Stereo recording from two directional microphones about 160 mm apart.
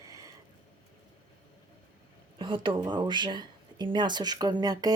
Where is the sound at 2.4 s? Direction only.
30° right (ahead or behind).